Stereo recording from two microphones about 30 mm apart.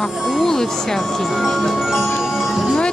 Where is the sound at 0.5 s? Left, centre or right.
Centre.